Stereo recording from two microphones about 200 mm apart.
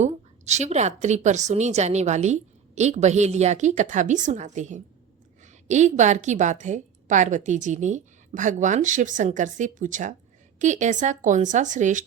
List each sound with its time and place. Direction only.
0.0 s a woman's voice: 35° right (ahead or behind)